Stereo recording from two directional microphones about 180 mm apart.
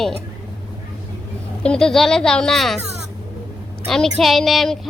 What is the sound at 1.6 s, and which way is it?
A woman's voice, 5° left (ahead or behind).